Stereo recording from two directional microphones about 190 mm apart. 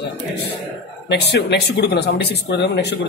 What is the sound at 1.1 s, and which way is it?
Speech, 60° left (ahead or behind).